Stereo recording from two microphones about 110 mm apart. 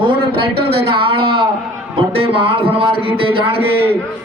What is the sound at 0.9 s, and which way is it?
A man's voice, 55° right (ahead or behind).